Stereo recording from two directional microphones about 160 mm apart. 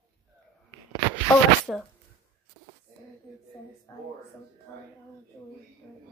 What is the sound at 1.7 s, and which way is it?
Music, 5° left (ahead or behind).